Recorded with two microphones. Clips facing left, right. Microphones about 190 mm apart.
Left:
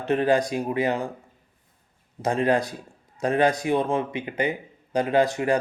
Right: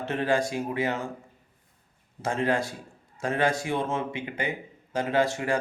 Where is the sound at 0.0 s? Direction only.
20° left (ahead or behind).